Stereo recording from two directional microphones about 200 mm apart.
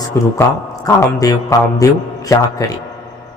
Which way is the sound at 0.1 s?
15° left (ahead or behind).